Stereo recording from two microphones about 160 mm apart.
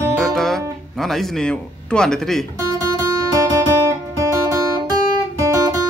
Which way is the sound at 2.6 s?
20° right (ahead or behind).